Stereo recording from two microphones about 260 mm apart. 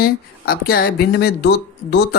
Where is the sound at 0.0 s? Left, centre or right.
Left.